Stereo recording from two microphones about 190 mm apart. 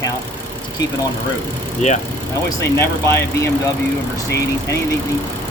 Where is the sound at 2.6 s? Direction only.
15° left (ahead or behind).